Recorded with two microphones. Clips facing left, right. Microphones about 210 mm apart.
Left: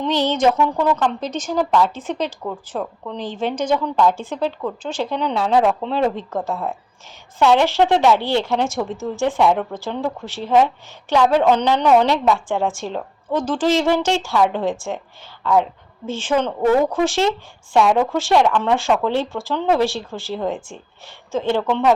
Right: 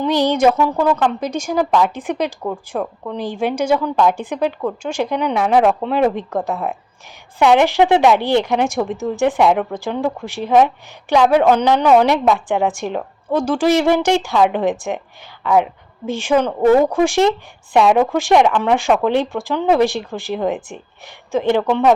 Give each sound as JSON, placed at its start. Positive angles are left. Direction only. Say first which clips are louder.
{"t": 0.0, "sound": "a woman's voice", "louder": "right 3 dB", "side_deg": -10}